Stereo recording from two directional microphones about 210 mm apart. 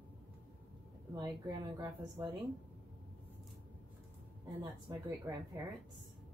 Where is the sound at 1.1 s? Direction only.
20° right (ahead or behind).